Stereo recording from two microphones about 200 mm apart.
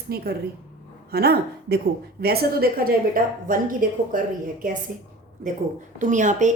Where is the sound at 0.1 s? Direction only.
50° right (ahead or behind).